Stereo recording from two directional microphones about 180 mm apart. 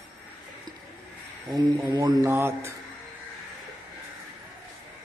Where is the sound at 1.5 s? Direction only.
25° right (ahead or behind).